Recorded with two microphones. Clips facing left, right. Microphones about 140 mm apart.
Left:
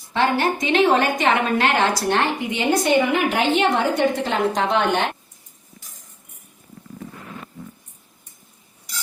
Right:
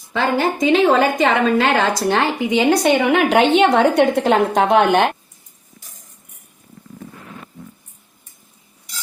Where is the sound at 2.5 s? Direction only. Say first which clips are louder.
Right 6 dB; 90° right; by 5.0 s 50° right (ahead or behind).